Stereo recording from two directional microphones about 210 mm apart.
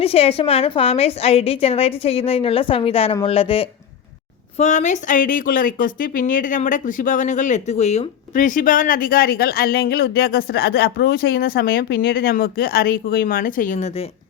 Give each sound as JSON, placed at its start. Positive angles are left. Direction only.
{"t": 0.0, "sound": "a woman's voice", "side_deg": 30}